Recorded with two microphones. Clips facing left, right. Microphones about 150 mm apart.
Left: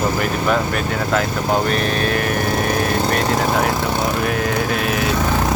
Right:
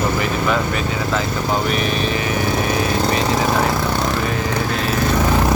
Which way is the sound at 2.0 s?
60° left (ahead or behind).